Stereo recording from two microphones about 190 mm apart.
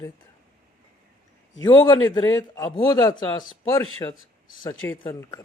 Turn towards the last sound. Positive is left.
turn(degrees=15)  # may be behind; listen again after turning